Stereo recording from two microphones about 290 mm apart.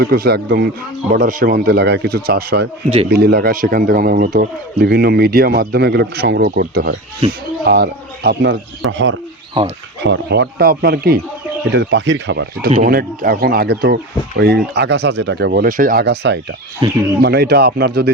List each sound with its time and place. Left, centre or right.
0.0 s speech: right
16.8 s speech: centre
17.2 s speech: right